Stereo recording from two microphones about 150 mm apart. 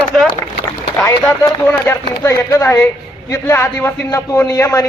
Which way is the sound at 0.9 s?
20° left (ahead or behind).